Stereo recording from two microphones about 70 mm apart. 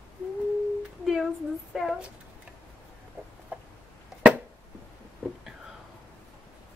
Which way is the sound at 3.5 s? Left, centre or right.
Right.